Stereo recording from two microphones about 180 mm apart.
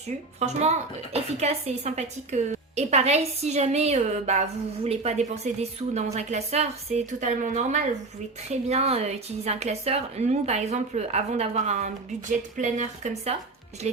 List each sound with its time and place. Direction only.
0.3 s a woman's voice: 40° right (ahead or behind)